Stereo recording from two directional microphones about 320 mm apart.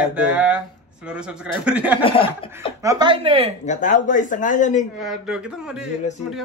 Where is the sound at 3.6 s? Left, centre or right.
Left.